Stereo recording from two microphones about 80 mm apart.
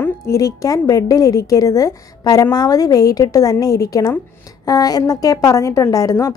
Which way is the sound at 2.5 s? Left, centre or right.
Left.